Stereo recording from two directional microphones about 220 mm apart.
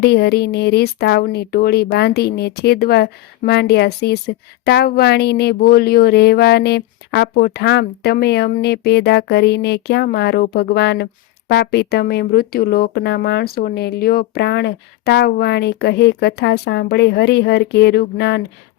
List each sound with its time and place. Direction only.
0.0 s speech: 45° left (ahead or behind)